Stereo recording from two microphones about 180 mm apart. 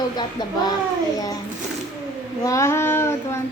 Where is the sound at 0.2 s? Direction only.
25° left (ahead or behind).